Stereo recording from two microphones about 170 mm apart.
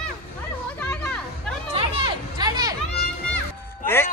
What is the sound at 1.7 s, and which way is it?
Music, 25° right (ahead or behind).